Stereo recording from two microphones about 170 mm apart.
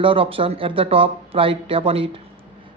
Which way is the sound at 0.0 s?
30° right (ahead or behind).